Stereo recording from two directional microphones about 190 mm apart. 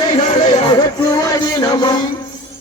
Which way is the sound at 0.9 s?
20° left (ahead or behind).